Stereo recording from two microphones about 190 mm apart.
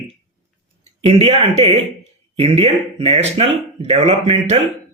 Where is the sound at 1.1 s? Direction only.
30° right (ahead or behind).